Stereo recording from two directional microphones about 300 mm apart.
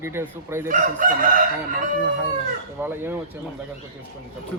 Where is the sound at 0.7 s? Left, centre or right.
Right.